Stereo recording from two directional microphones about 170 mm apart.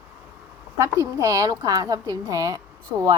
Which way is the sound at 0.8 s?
20° right (ahead or behind).